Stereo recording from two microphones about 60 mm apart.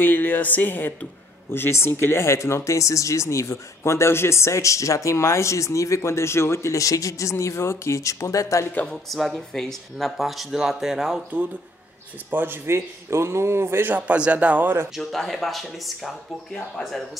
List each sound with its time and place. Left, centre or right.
0.0 s speech: left
8.8 s speech: centre
12.3 s speech: right
12.6 s speech: right
13.9 s speech: right
15.0 s speech: centre